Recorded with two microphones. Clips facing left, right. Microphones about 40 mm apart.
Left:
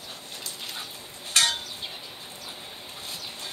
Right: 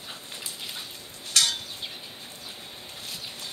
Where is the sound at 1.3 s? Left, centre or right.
Left.